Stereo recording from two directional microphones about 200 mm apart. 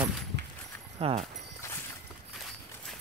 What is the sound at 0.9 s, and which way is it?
Speech, 30° right (ahead or behind).